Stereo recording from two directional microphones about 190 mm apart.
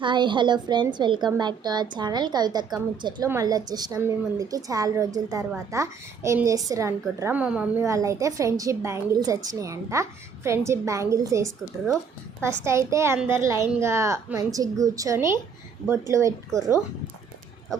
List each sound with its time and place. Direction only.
0.0 s a woman's voice: 25° right (ahead or behind)